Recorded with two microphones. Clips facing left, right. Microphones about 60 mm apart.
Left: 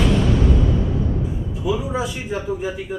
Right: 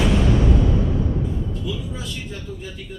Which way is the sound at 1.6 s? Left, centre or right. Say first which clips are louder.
Left 8 dB; centre.